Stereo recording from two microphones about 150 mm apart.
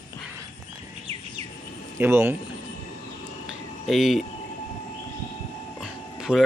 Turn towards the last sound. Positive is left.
turn(degrees=-5)  # may be behind; listen again after turning